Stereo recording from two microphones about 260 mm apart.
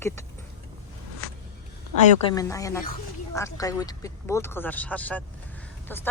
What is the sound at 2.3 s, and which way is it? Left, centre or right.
Speech, centre.